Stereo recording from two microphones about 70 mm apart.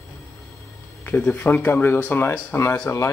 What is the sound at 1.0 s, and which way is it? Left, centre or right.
Speech, left.